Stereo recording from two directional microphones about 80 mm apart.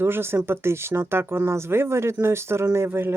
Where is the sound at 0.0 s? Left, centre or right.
Right.